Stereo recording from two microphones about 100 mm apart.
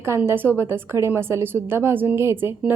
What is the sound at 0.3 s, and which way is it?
A woman's voice, 20° right (ahead or behind).